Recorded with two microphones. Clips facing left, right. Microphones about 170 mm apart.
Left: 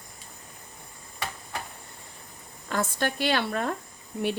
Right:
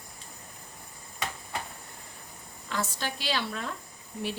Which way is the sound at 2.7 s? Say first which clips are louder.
Left 5 dB; 55° left (ahead or behind).